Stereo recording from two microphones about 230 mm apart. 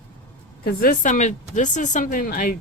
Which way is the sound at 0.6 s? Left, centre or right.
Left.